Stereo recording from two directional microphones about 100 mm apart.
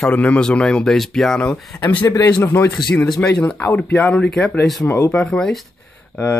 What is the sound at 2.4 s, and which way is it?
Speech, 25° left (ahead or behind).